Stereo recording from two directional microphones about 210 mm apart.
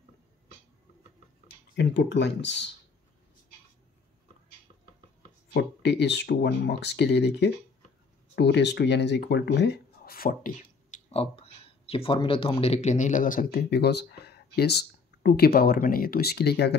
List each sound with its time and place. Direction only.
1.8 s speech: 55° left (ahead or behind)
5.5 s speech: 55° left (ahead or behind)